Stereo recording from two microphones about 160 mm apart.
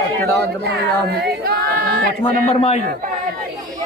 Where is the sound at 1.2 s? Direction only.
75° right (ahead or behind).